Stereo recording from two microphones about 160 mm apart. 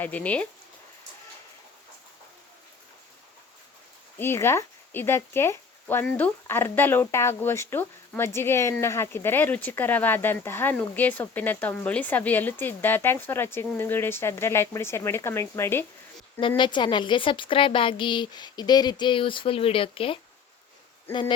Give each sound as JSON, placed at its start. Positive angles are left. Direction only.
{"t": 0.0, "sound": "speech", "side_deg": 10}
{"t": 4.2, "sound": "speech", "side_deg": 15}
{"t": 16.6, "sound": "a woman's voice", "side_deg": 30}